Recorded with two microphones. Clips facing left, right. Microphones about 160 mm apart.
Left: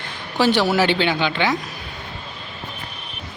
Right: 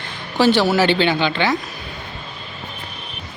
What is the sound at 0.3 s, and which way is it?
Speech, 15° left (ahead or behind).